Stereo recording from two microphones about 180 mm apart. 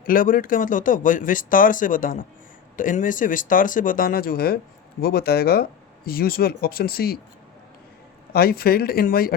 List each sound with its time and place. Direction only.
0.0 s speech: 50° left (ahead or behind)
8.3 s speech: 60° left (ahead or behind)